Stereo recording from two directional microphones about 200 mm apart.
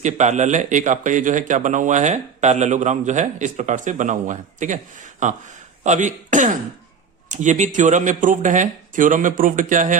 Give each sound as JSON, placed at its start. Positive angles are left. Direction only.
{"t": 0.0, "sound": "speech", "side_deg": -35}